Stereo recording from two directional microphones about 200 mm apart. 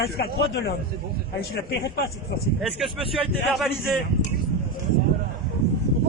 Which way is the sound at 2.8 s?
Centre (ahead or behind).